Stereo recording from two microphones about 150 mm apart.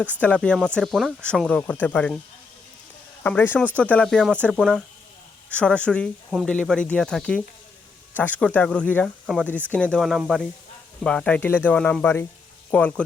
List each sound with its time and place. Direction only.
0.2 s speech: 10° left (ahead or behind)
3.2 s speech: 10° left (ahead or behind)